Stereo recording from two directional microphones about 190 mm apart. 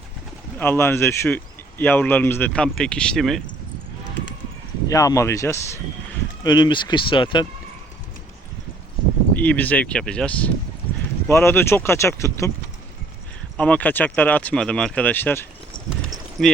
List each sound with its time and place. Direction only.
0.6 s speech: 10° left (ahead or behind)
4.9 s speech: 15° left (ahead or behind)
9.3 s speech: 10° left (ahead or behind)
13.6 s speech: 5° left (ahead or behind)
16.4 s speech: centre (ahead or behind)